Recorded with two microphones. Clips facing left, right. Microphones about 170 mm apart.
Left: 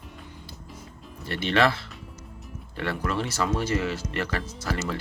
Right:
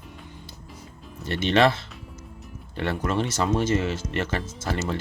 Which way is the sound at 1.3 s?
20° right (ahead or behind).